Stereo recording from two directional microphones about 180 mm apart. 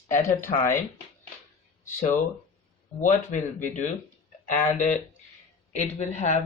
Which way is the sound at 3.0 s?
40° left (ahead or behind).